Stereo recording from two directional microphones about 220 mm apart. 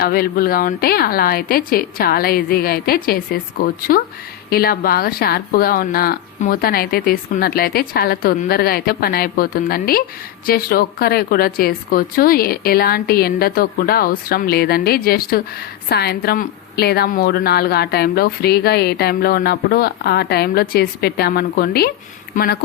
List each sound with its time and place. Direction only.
0.0 s a woman's voice: 45° left (ahead or behind)